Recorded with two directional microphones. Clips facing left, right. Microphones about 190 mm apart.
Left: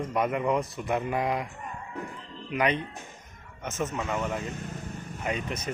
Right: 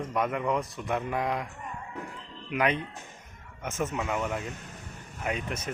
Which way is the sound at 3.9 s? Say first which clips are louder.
Even; 5° right (ahead or behind).